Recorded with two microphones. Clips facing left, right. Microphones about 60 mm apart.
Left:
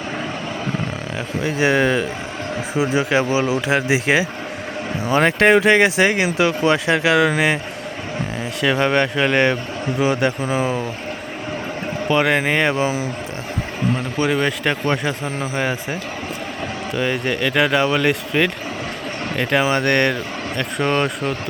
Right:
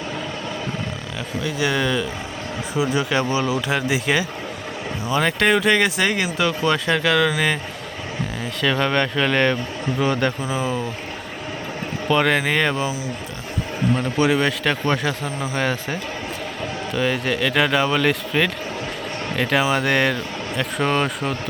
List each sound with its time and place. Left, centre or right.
1.4 s speech: left
5.1 s speech: left
8.6 s speech: centre
10.4 s speech: centre
12.0 s speech: centre
13.9 s speech: centre
14.6 s speech: centre
16.9 s speech: centre